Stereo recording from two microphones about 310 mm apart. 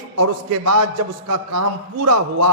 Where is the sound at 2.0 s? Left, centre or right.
Right.